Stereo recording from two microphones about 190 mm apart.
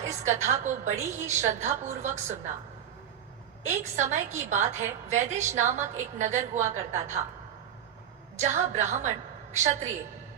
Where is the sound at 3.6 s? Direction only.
40° right (ahead or behind).